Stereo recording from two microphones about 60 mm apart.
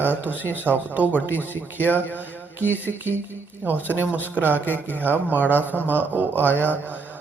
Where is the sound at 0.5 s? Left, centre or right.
Right.